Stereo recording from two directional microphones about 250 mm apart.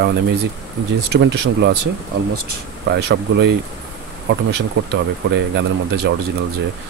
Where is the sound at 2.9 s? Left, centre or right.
Right.